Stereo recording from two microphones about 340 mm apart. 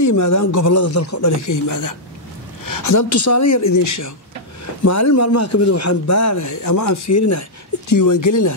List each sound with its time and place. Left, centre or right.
0.0 s speech: left
2.6 s a sound: left
3.2 s speech: left
7.9 s speech: left